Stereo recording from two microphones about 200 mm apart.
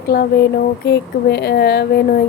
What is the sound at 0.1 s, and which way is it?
Speech, 50° left (ahead or behind).